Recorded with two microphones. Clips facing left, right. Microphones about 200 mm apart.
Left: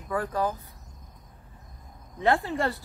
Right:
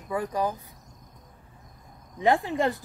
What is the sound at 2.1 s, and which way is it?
Speech, 15° right (ahead or behind).